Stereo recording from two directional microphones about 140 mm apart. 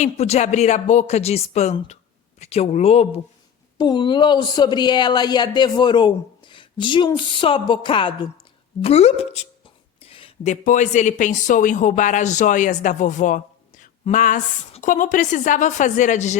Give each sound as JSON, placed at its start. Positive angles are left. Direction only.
{"t": 0.0, "sound": "a woman's voice", "side_deg": 50}
{"t": 3.8, "sound": "a woman's voice", "side_deg": 30}
{"t": 10.0, "sound": "a sound", "side_deg": 40}
{"t": 10.5, "sound": "speech", "side_deg": 65}